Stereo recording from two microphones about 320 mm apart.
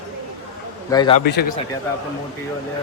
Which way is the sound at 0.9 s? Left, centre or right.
Centre.